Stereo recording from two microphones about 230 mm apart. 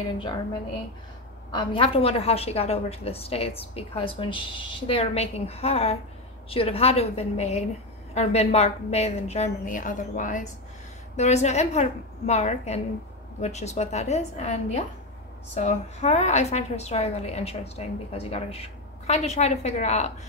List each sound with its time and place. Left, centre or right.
1.5 s a woman's voice: left